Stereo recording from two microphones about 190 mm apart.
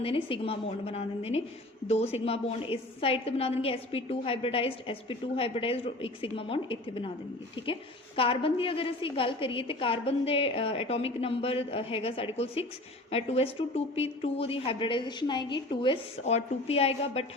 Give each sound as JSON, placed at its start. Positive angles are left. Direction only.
{"t": 0.0, "sound": "a woman's voice", "side_deg": 30}